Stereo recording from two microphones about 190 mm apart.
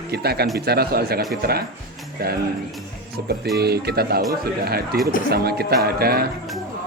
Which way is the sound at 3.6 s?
55° right (ahead or behind).